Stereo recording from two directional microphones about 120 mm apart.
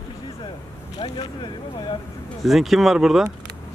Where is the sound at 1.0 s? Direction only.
40° left (ahead or behind).